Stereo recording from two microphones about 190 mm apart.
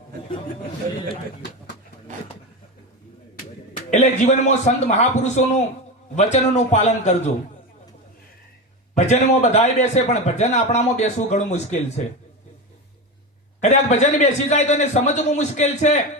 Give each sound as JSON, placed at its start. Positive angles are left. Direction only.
{"t": 3.9, "sound": "a man's voice", "side_deg": 35}
{"t": 9.0, "sound": "a man's voice", "side_deg": 35}
{"t": 13.6, "sound": "a man's voice", "side_deg": 40}